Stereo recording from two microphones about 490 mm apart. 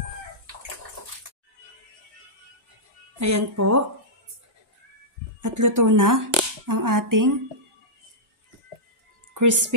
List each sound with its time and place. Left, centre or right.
3.2 s speech: right
5.4 s speech: right
9.3 s a woman's voice: right